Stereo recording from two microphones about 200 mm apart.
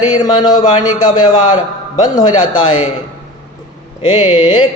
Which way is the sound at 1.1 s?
20° left (ahead or behind).